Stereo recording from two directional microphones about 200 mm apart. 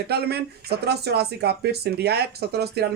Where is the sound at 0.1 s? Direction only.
55° right (ahead or behind).